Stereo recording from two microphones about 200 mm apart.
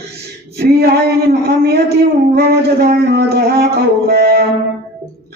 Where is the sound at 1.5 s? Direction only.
50° right (ahead or behind).